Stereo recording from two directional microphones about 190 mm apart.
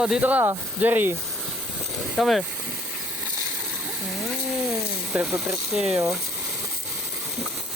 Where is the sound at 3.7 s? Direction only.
5° right (ahead or behind).